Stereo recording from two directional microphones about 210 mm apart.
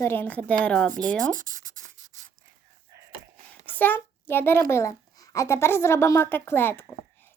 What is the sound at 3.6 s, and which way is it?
A child's voice, 10° left (ahead or behind).